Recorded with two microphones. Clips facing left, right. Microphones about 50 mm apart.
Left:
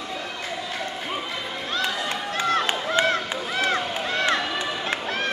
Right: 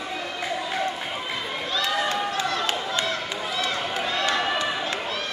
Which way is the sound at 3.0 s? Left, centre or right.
Left.